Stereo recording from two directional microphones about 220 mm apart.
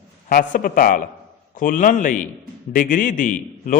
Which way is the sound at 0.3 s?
40° left (ahead or behind).